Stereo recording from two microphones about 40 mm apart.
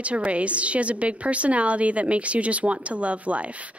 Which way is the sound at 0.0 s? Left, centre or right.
Right.